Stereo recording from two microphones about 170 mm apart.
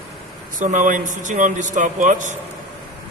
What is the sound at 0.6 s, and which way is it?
A man's voice, 45° right (ahead or behind).